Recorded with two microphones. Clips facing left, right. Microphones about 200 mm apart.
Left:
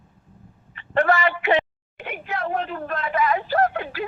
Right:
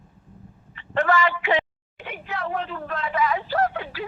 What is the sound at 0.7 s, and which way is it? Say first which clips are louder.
A woman's voice: left 2 dB; 55° left (ahead or behind).